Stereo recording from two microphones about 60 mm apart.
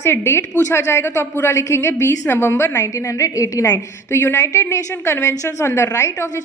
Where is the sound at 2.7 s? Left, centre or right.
Left.